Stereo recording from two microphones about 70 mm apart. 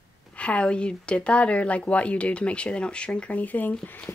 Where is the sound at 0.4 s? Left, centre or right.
Centre.